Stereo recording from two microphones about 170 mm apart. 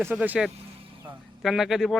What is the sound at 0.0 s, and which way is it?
A man's voice, 10° right (ahead or behind).